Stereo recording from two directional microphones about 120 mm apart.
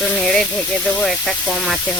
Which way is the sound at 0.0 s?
5° left (ahead or behind).